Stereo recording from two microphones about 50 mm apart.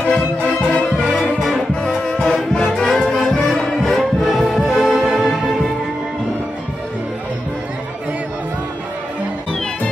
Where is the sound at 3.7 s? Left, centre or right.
Centre.